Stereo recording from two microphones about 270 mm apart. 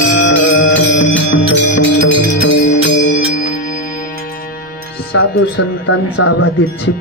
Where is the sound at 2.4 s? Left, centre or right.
Left.